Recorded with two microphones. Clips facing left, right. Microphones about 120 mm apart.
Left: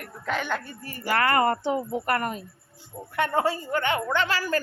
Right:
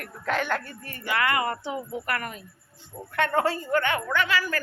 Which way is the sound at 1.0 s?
40° left (ahead or behind).